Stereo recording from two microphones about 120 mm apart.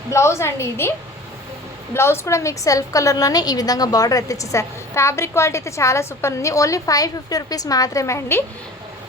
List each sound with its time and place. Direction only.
0.1 s a woman's voice: 25° left (ahead or behind)